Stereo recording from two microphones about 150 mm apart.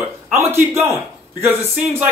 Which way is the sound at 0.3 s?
15° right (ahead or behind).